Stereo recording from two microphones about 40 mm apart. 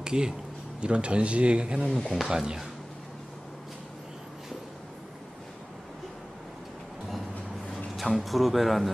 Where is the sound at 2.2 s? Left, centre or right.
Centre.